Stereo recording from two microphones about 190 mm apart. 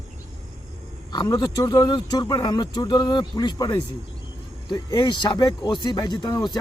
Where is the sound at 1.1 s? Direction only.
20° left (ahead or behind).